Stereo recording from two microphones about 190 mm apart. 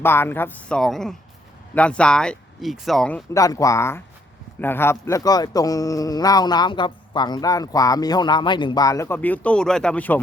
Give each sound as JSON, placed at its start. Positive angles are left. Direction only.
{"t": 0.0, "sound": "speech", "side_deg": 10}
{"t": 3.3, "sound": "speech", "side_deg": 15}